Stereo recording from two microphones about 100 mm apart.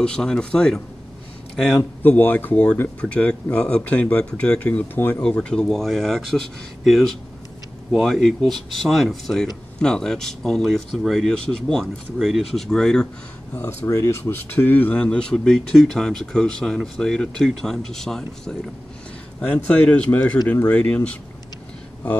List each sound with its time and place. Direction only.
0.0 s speech: 10° left (ahead or behind)
1.8 s speech: 20° left (ahead or behind)
13.8 s speech: 30° left (ahead or behind)
14.5 s speech: 20° left (ahead or behind)
19.4 s speech: 15° left (ahead or behind)